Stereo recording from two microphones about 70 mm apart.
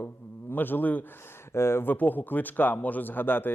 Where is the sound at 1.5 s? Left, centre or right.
Left.